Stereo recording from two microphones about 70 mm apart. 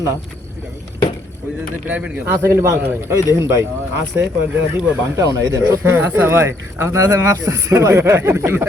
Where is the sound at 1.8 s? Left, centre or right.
Centre.